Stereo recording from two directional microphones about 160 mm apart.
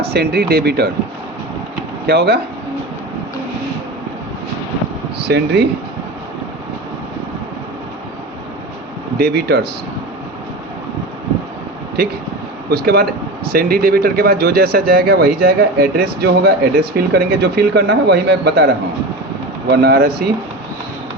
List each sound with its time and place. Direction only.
0.1 s speech: 85° right
2.0 s speech: 85° right
5.2 s speech: 90° right
9.1 s speech: 85° right
12.0 s speech: 80° right
19.7 s speech: 90° right